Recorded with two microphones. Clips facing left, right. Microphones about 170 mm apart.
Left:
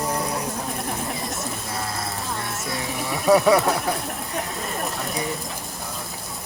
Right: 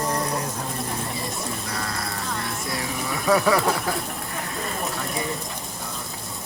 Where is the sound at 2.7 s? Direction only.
25° left (ahead or behind).